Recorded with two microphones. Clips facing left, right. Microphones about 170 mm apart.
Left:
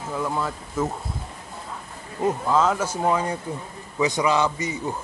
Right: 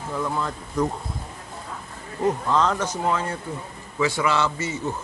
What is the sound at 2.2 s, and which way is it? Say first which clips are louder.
A man's voice: left 1 dB; 5° left (ahead or behind).